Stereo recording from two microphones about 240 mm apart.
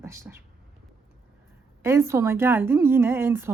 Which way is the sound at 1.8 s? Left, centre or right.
Centre.